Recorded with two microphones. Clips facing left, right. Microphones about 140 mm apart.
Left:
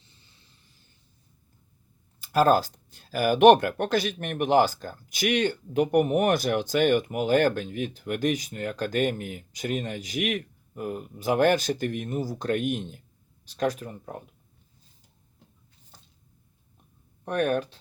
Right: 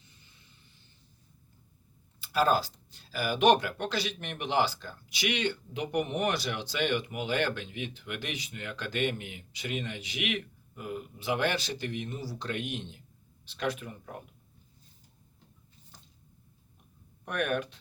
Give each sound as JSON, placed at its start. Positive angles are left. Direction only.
{"t": 2.2, "sound": "speech", "side_deg": 45}
{"t": 17.2, "sound": "speech", "side_deg": 35}